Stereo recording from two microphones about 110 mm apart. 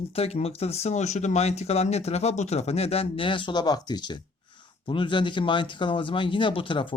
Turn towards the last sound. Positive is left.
turn(degrees=50)  # may be behind; listen again after turning